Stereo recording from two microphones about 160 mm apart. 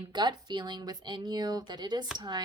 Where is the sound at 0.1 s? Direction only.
30° right (ahead or behind).